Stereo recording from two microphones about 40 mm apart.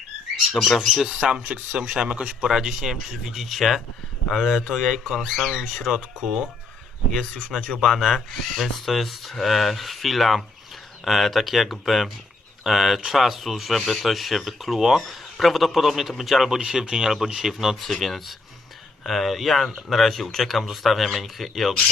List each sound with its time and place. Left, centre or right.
0.5 s speech: centre
1.2 s speech: right
1.8 s speech: centre
2.0 s speech: right
2.5 s speech: centre
7.8 s speech: centre
17.7 s speech: centre